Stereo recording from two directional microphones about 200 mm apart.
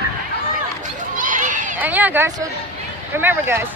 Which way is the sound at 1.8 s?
10° right (ahead or behind).